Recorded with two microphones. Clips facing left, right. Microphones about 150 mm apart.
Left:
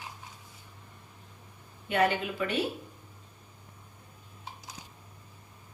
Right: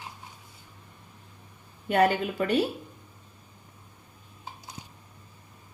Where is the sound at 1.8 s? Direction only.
40° right (ahead or behind).